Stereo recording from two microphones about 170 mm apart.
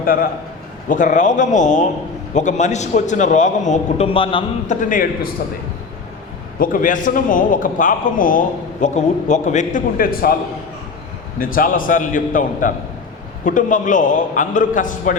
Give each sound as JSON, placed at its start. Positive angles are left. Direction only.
{"t": 0.0, "sound": "a man's voice", "side_deg": 55}
{"t": 4.6, "sound": "a man's voice", "side_deg": 45}
{"t": 6.6, "sound": "a man's voice", "side_deg": 50}
{"t": 11.3, "sound": "a man's voice", "side_deg": 55}